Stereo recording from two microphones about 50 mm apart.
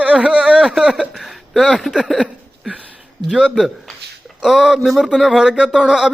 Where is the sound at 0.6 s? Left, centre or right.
Centre.